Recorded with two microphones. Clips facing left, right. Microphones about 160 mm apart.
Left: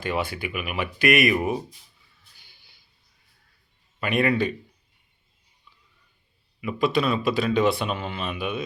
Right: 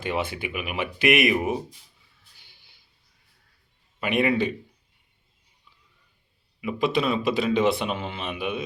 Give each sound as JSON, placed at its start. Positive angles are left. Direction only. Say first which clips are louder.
{"t": 0.0, "sound": "a man's voice", "louder": "even", "side_deg": -20}
{"t": 4.0, "sound": "a man's voice", "louder": "even", "side_deg": -20}
{"t": 6.6, "sound": "a man's voice", "louder": "left 1 dB", "side_deg": -20}